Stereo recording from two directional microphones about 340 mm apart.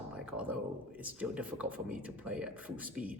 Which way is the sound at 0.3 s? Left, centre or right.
Centre.